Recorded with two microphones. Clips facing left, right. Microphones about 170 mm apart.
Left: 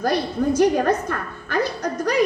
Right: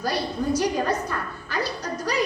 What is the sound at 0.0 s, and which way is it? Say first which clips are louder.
A woman's voice: left 5 dB; 55° left (ahead or behind).